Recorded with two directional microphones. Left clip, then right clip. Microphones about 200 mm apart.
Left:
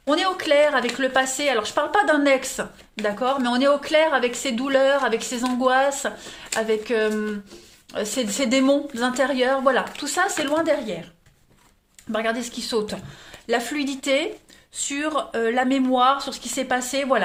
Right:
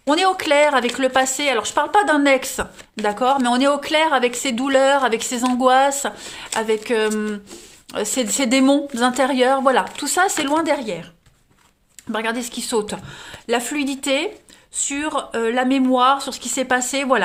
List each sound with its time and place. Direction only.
0.0 s speech: 40° right (ahead or behind)
12.1 s speech: 35° right (ahead or behind)